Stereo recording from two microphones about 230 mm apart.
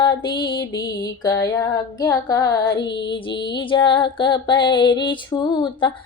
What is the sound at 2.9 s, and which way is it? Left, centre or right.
Music, left.